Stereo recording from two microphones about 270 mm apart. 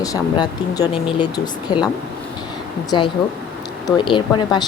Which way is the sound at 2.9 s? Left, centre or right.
Centre.